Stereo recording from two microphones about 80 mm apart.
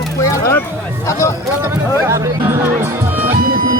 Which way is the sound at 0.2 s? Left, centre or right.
Left.